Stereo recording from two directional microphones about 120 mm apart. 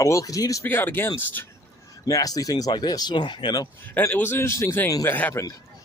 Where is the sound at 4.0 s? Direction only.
15° left (ahead or behind).